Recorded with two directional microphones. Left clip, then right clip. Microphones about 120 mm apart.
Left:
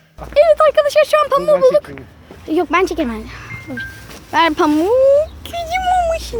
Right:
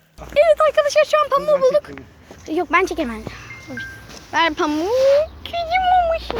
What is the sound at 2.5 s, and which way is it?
Speech, 30° left (ahead or behind).